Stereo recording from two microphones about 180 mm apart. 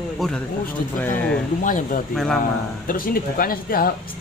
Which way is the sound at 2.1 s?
Centre (ahead or behind).